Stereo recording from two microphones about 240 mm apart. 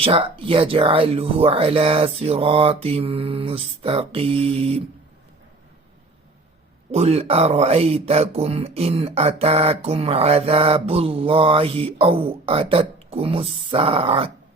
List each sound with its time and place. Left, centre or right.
0.0 s speech: right
6.9 s speech: right